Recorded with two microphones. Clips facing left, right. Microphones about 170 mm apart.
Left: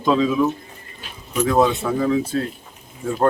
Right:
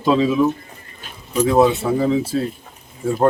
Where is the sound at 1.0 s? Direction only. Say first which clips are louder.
Right 3 dB; 35° right (ahead or behind).